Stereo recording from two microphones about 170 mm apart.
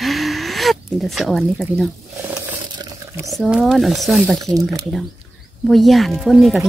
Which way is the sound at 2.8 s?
20° right (ahead or behind).